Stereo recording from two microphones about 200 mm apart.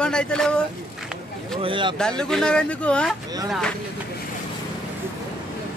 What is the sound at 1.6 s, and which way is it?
Speech, 25° right (ahead or behind).